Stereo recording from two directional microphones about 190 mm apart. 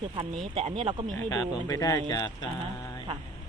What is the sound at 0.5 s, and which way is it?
Speech, 30° right (ahead or behind).